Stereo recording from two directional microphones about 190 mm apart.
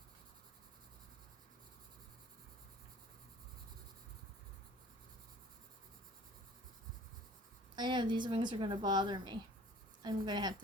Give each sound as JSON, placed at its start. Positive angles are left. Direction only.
{"t": 7.8, "sound": "a woman's voice", "side_deg": -25}